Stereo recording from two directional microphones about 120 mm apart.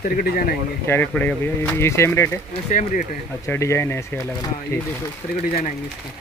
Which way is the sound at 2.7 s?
90° left.